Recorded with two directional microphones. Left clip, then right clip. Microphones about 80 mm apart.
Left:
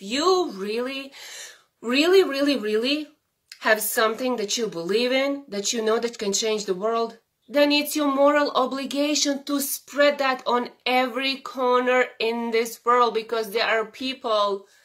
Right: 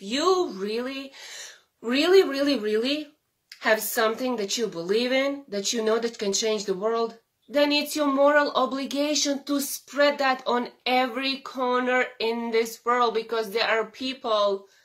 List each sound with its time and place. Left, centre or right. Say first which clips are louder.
0.0 s a woman's voice: left 2 dB; left